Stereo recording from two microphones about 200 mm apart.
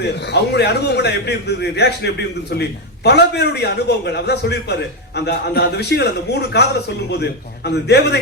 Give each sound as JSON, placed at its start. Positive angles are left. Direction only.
{"t": 0.0, "sound": "a man's voice", "side_deg": 55}